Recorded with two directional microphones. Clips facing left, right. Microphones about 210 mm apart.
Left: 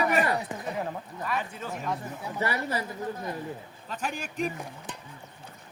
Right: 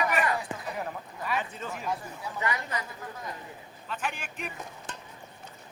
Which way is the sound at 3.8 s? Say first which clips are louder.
Left 1 dB; 40° left (ahead or behind).